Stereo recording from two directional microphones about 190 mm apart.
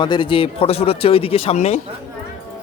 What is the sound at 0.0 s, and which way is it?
Speech, 25° left (ahead or behind).